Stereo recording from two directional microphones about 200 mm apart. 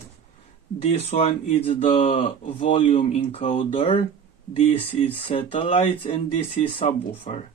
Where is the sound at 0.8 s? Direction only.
35° left (ahead or behind).